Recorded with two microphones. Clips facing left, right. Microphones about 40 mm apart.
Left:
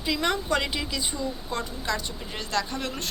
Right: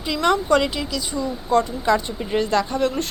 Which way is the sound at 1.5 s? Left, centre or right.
Centre.